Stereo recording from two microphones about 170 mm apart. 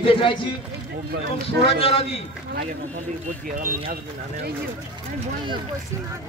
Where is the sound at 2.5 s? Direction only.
50° right (ahead or behind).